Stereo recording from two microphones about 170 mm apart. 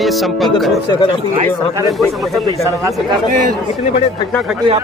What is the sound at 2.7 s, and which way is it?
Speech, 20° right (ahead or behind).